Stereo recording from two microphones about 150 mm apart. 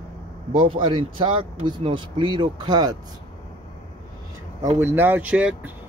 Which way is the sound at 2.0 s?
35° right (ahead or behind).